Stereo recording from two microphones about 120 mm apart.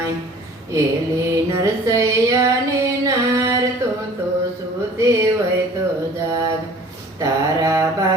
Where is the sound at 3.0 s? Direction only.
25° right (ahead or behind).